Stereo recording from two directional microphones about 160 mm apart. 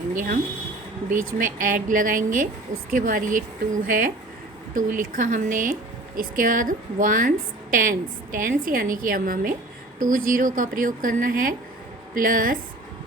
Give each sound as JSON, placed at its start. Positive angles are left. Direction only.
{"t": 1.1, "sound": "a woman's voice", "side_deg": -55}